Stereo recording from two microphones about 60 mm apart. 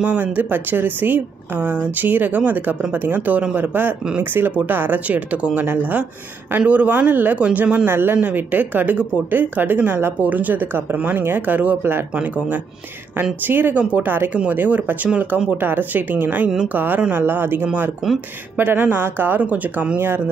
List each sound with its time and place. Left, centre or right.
0.0 s speech: right